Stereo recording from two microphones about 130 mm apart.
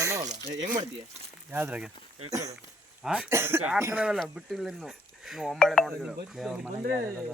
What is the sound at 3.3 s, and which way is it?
Speech, 20° right (ahead or behind).